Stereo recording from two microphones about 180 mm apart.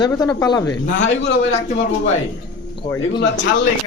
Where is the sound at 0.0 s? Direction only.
20° left (ahead or behind).